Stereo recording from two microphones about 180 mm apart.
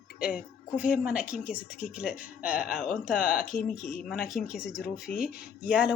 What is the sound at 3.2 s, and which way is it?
Speech, 50° left (ahead or behind).